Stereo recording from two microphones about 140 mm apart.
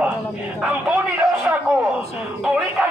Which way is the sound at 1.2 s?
15° right (ahead or behind).